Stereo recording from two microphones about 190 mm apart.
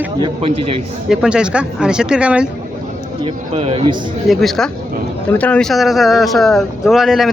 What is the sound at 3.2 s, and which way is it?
Speech, 35° right (ahead or behind).